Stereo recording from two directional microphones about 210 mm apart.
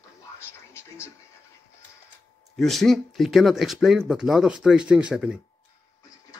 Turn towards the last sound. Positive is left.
turn(degrees=-5)  # may be behind; listen again after turning